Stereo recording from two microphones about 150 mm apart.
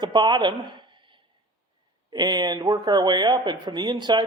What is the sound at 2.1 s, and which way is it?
A man's voice, 30° right (ahead or behind).